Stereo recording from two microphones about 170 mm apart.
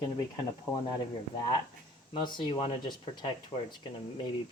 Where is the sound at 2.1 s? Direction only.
25° left (ahead or behind).